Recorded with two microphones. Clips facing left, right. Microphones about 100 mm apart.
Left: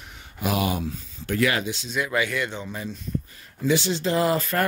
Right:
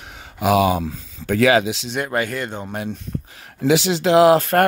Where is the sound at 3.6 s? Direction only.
90° right; by 4.7 s 65° right (ahead or behind).